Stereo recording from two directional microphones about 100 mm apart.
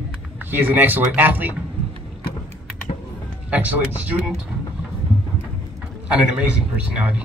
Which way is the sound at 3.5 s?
15° right (ahead or behind).